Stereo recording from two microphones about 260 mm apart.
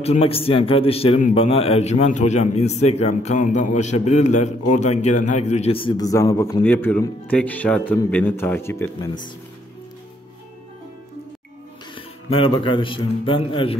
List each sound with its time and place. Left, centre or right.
0.0 s a man's voice: left
11.9 s a man's voice: centre